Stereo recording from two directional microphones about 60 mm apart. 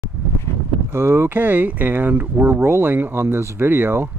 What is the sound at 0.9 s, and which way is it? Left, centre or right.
Speech, right.